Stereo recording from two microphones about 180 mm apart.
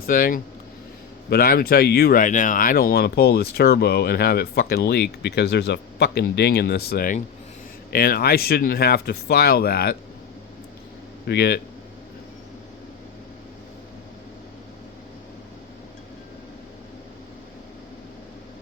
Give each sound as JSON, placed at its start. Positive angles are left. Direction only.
{"t": 0.0, "sound": "speech", "side_deg": 50}
{"t": 11.3, "sound": "speech", "side_deg": 65}